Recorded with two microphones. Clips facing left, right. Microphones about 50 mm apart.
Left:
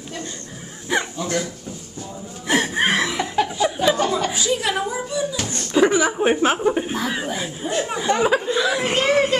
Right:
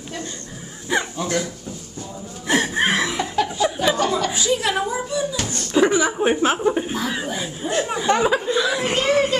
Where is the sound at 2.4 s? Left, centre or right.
Centre.